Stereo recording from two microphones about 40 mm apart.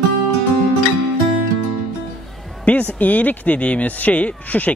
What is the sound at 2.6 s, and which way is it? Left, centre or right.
Speech, left.